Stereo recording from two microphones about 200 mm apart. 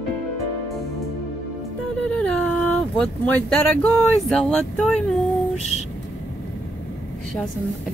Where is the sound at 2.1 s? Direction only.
5° left (ahead or behind).